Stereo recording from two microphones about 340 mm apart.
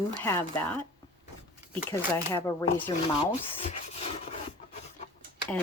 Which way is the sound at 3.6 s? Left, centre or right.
Centre.